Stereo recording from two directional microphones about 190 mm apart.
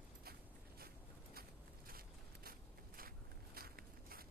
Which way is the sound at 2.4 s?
50° right (ahead or behind).